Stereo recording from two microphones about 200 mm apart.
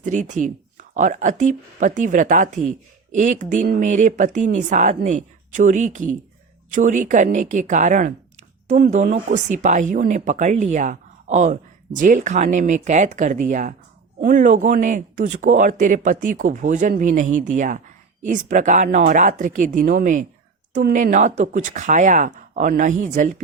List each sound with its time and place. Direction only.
0.0 s speech: 40° right (ahead or behind)